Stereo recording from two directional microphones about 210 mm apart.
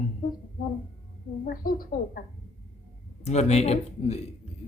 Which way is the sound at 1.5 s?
45° left (ahead or behind).